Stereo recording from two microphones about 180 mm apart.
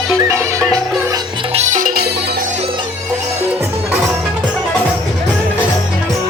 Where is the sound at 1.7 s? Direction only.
55° right (ahead or behind).